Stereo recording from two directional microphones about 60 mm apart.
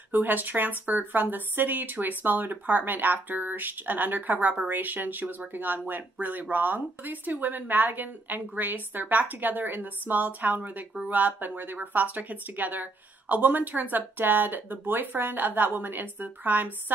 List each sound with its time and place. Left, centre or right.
0.1 s a woman's voice: right